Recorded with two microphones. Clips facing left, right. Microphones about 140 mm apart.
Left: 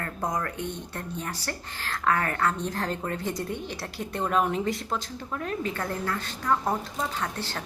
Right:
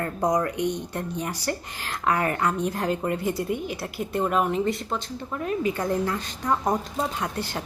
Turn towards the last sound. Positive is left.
turn(degrees=-15)  # may be behind; listen again after turning